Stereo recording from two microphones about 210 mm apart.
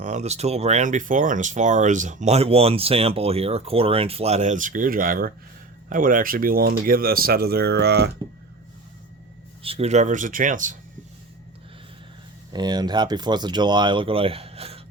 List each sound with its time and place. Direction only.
0.0 s speech: 35° right (ahead or behind); by 8.1 s 50° right (ahead or behind)
9.6 s speech: 30° right (ahead or behind)
12.5 s speech: 20° right (ahead or behind)